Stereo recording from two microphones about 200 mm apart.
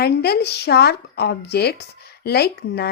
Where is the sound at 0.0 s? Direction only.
55° left (ahead or behind).